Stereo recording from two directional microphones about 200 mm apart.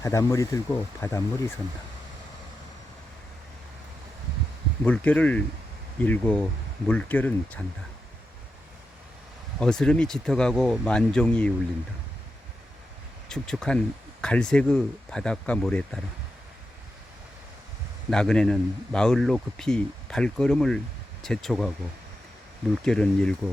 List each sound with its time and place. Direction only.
0.0 s speech: 15° left (ahead or behind)
4.8 s speech: 5° left (ahead or behind)
9.6 s a man's voice: 5° left (ahead or behind)
13.2 s a man's voice: 5° left (ahead or behind)
18.1 s a man's voice: 5° left (ahead or behind)
22.8 s a man's voice: 5° left (ahead or behind)